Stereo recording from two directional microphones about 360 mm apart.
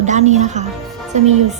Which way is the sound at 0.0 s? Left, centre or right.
Centre.